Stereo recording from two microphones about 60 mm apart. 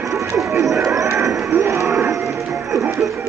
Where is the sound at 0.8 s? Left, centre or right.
Right.